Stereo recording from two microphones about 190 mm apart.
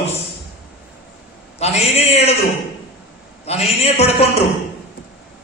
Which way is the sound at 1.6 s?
35° left (ahead or behind).